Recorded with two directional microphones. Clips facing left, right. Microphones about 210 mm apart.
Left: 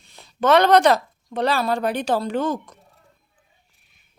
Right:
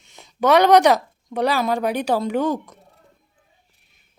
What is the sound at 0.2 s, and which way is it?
Speech, 15° right (ahead or behind).